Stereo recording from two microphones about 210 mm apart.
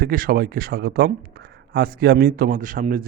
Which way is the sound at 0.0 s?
45° right (ahead or behind).